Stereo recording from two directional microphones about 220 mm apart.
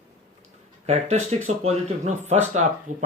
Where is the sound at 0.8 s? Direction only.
30° right (ahead or behind).